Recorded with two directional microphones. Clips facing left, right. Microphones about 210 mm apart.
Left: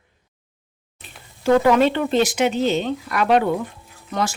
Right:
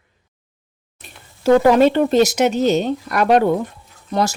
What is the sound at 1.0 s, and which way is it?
Speech, 40° right (ahead or behind).